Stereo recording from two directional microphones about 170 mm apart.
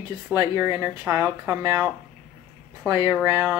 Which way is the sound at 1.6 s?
20° right (ahead or behind).